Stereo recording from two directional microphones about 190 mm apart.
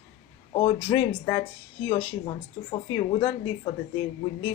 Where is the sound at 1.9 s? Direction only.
30° left (ahead or behind).